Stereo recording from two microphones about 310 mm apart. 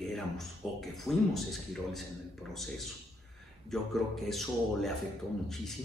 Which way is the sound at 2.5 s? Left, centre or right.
Centre.